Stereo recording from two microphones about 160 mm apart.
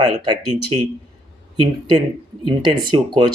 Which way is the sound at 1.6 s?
25° right (ahead or behind).